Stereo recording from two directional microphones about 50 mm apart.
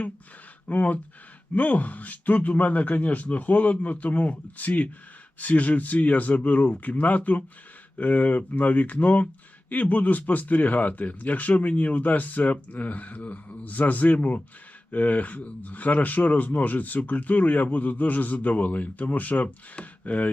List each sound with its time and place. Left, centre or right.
0.7 s speech: left